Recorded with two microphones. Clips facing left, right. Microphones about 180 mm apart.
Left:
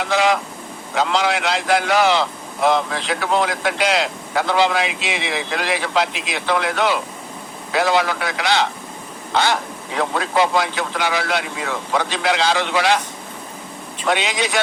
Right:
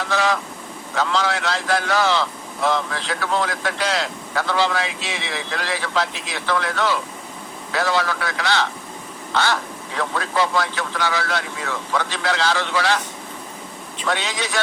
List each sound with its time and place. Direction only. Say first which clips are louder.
0.0 s speech: left 3 dB; 15° left (ahead or behind)
14.1 s speech: left 4 dB; 15° left (ahead or behind)